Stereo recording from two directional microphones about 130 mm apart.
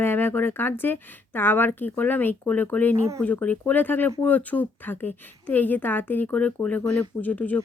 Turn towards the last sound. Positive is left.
turn(degrees=10)  # may be behind; listen again after turning